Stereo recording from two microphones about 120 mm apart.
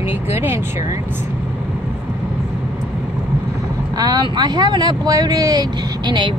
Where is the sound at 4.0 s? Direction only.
35° right (ahead or behind).